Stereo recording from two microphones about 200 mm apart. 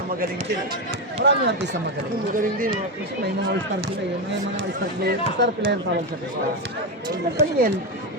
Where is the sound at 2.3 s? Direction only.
45° right (ahead or behind).